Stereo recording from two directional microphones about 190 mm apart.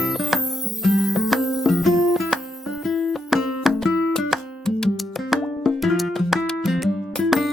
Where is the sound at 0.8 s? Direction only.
Centre (ahead or behind).